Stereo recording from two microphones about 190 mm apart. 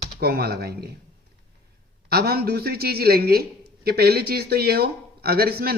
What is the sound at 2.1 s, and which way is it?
Speech, 55° right (ahead or behind).